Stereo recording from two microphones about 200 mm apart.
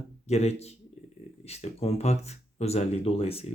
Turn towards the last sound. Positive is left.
turn(degrees=30)  # may be behind; listen again after turning